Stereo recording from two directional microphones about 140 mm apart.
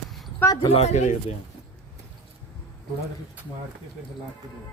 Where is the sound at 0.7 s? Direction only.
50° left (ahead or behind).